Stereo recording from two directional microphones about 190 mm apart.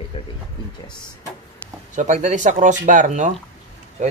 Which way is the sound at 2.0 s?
40° right (ahead or behind).